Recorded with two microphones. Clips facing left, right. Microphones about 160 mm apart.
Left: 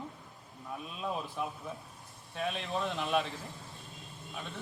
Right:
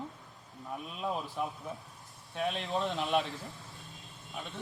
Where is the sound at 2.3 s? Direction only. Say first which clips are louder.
Right 2 dB; 20° right (ahead or behind).